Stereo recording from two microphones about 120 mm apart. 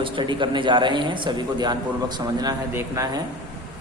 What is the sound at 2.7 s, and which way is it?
Speech, 20° right (ahead or behind).